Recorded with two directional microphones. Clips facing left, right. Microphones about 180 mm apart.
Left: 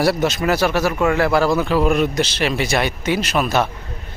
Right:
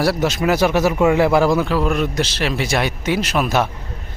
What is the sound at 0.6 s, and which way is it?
Speech, 20° right (ahead or behind).